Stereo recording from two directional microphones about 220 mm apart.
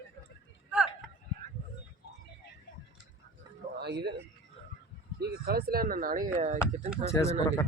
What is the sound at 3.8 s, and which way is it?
Speech, 50° right (ahead or behind).